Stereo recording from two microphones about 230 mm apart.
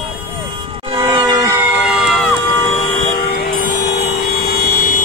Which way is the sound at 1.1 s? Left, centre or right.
Centre.